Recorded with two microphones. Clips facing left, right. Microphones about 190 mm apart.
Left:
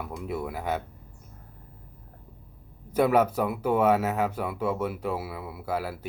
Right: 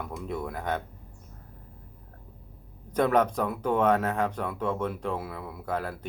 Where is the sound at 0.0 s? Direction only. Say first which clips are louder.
Left 1 dB; 5° left (ahead or behind).